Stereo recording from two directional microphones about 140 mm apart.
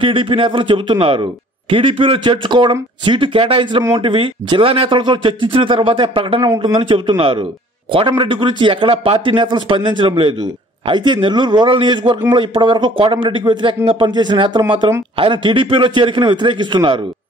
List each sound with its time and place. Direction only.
0.0 s speech: 40° right (ahead or behind)